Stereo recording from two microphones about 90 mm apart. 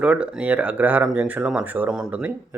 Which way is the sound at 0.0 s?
10° right (ahead or behind).